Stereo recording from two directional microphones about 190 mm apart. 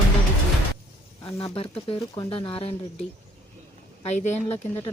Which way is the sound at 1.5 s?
30° left (ahead or behind).